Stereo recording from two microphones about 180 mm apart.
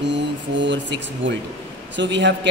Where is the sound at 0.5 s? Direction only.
75° right (ahead or behind).